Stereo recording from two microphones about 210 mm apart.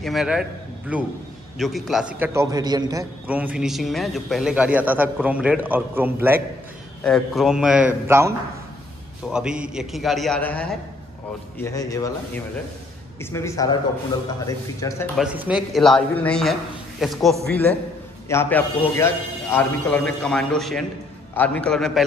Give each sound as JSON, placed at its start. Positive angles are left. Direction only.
{"t": 0.0, "sound": "a man's voice", "side_deg": 0}
{"t": 7.0, "sound": "a man's voice", "side_deg": 5}
{"t": 13.2, "sound": "a man's voice", "side_deg": 15}
{"t": 15.1, "sound": "a man's voice", "side_deg": -5}